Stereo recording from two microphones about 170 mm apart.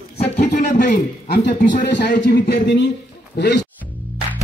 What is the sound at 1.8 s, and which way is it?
Speech, 90° left.